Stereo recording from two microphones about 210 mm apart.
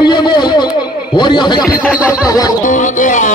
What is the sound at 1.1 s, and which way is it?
Speech, 20° left (ahead or behind).